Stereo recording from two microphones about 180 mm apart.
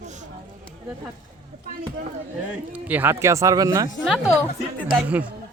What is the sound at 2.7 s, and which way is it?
Speech, 10° right (ahead or behind).